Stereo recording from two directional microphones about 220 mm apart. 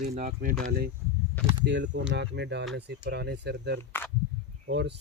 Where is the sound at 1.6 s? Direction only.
55° right (ahead or behind).